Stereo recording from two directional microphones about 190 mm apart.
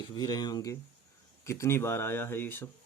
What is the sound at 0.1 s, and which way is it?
Speech, 20° left (ahead or behind).